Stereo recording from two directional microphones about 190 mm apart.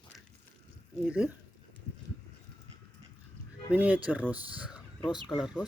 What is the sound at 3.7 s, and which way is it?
Speech, 10° right (ahead or behind).